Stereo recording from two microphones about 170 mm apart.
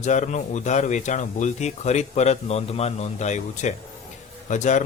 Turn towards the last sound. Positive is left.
turn(degrees=45)  # may be behind; listen again after turning